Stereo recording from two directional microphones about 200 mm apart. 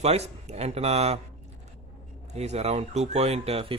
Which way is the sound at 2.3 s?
35° right (ahead or behind).